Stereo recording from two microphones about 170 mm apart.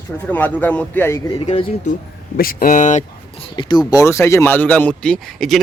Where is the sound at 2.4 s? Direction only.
60° left (ahead or behind).